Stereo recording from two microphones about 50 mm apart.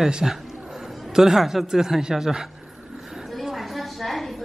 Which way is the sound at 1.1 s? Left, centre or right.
Centre.